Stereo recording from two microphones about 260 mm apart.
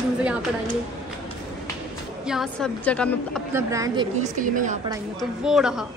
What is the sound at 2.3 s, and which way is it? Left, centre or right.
A woman's voice, centre.